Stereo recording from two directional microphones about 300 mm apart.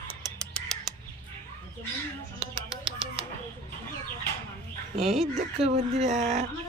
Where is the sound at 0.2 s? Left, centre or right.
Centre.